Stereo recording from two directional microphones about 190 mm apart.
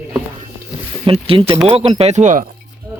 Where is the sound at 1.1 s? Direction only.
30° right (ahead or behind).